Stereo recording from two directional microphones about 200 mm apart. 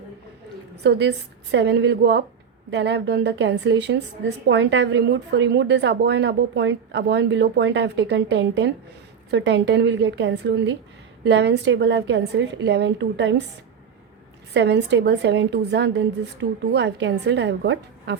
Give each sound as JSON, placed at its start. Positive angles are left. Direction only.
{"t": 0.8, "sound": "a woman's voice", "side_deg": -55}
{"t": 14.5, "sound": "a woman's voice", "side_deg": -60}